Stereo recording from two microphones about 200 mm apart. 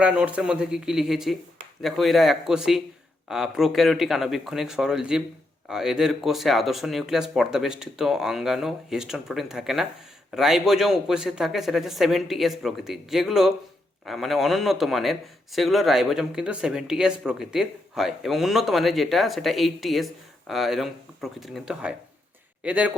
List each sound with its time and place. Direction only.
0.0 s a man's voice: 5° right (ahead or behind)